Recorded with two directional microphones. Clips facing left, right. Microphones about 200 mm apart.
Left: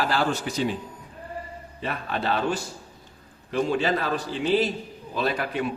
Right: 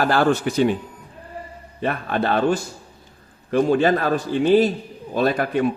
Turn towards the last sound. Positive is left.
turn(degrees=-45)  # may be behind; listen again after turning